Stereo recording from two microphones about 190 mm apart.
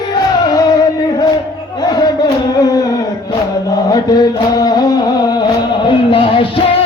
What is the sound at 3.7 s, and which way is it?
Chant, 20° left (ahead or behind).